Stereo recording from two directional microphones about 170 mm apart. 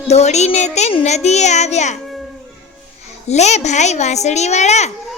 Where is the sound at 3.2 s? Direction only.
40° left (ahead or behind).